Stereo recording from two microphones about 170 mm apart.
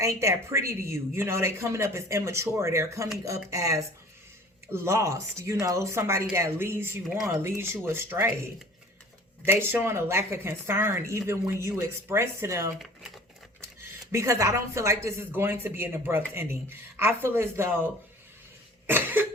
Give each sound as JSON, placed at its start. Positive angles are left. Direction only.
{"t": 0.0, "sound": "speech", "side_deg": -15}
{"t": 9.5, "sound": "speech", "side_deg": -15}
{"t": 14.1, "sound": "speech", "side_deg": -15}
{"t": 18.9, "sound": "speech", "side_deg": -10}